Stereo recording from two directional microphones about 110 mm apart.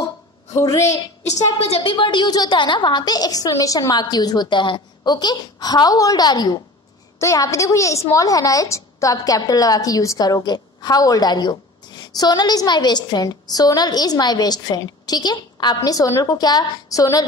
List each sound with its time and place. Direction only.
0.5 s a woman's voice: 25° left (ahead or behind)
1.2 s a woman's voice: 80° left; by 17.3 s 35° left (ahead or behind)